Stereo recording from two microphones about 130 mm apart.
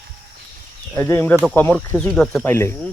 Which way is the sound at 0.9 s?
20° left (ahead or behind).